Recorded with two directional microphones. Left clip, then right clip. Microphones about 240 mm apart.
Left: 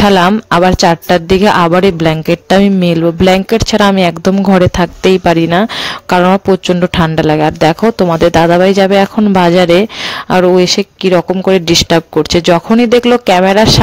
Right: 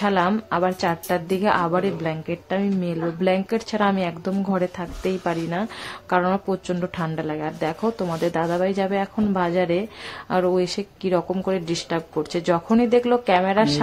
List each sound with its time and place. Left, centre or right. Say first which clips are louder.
0.0 s speech: left 13 dB; left